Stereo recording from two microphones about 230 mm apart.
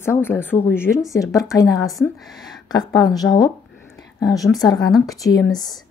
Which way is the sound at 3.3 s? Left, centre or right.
Centre.